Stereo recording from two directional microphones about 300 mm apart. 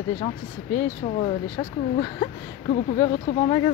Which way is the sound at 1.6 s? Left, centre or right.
Centre.